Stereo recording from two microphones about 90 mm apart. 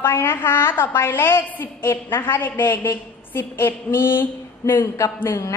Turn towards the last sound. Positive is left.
turn(degrees=25)  # may be behind; listen again after turning